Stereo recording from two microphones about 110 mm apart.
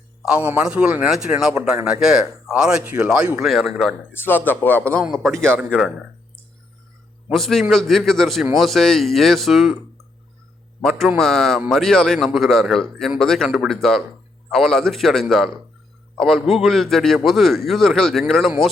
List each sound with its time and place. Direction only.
0.3 s a man's voice: 10° right (ahead or behind)
3.4 s a man's voice: 5° left (ahead or behind)
4.1 s speech: 20° left (ahead or behind)
5.5 s a man's voice: 5° right (ahead or behind)
7.3 s a man's voice: centre (ahead or behind)
10.8 s a man's voice: centre (ahead or behind)